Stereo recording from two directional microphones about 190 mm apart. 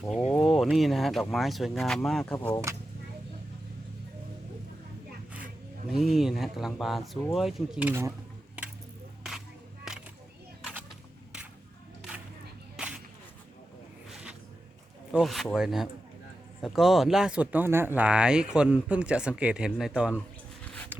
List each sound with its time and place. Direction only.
0.2 s a sound: 35° left (ahead or behind)
0.4 s speech: centre (ahead or behind)
5.9 s speech: centre (ahead or behind)
12.7 s whip: 5° right (ahead or behind)
14.1 s a sound: 5° right (ahead or behind)
15.1 s speech: centre (ahead or behind)